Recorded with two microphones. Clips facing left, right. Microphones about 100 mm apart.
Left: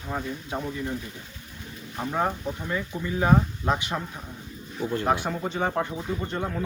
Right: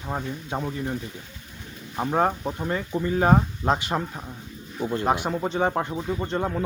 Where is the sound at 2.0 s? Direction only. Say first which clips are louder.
Right 4 dB; 25° right (ahead or behind).